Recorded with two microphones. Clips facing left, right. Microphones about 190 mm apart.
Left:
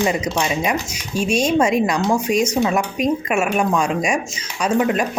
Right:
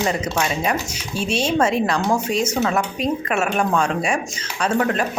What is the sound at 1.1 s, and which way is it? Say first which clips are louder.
Dishes: left 4 dB; 45° left (ahead or behind).